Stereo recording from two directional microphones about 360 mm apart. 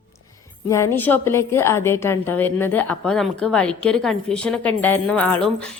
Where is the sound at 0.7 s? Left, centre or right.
Centre.